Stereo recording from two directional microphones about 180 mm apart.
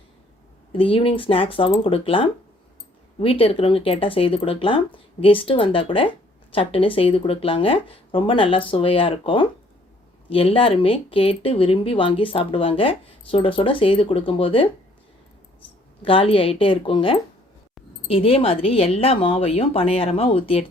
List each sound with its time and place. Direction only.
0.7 s speech: 30° left (ahead or behind)
16.0 s a woman's voice: 30° left (ahead or behind)